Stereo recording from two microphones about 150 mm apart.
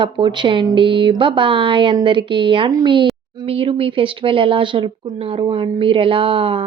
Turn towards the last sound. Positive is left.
turn(degrees=-35)  # may be behind; listen again after turning